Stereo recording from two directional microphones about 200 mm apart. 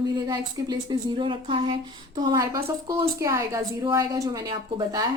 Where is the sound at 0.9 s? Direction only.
25° right (ahead or behind).